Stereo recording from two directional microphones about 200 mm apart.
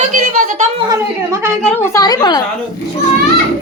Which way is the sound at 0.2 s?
45° right (ahead or behind).